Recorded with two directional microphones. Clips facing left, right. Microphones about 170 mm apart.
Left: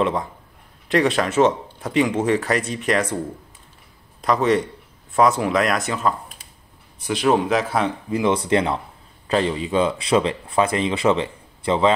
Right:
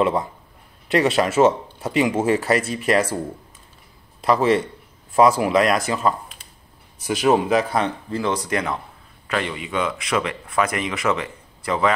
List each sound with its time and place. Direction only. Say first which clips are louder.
0.0 s speech: right 2 dB; 5° right (ahead or behind)
4.2 s speech: right 1 dB; centre (ahead or behind)
8.1 s speech: left 8 dB; 20° left (ahead or behind)